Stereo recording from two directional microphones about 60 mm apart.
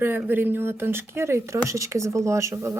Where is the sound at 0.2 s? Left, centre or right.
Right.